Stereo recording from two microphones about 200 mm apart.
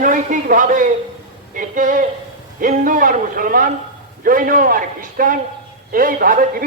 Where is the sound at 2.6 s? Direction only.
40° right (ahead or behind).